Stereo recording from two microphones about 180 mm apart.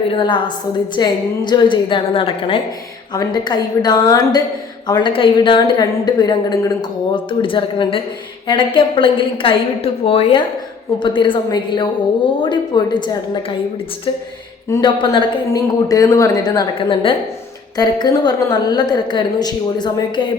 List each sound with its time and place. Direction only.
0.1 s speech: 25° left (ahead or behind)
14.7 s speech: 25° left (ahead or behind)